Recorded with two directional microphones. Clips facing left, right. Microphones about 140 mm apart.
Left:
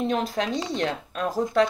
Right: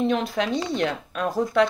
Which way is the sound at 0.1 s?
40° left (ahead or behind).